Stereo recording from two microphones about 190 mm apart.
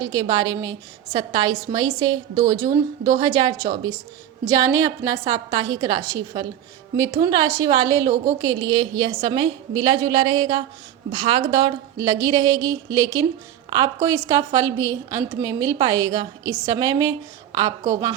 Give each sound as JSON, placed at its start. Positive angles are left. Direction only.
{"t": 0.0, "sound": "a woman's voice", "side_deg": -20}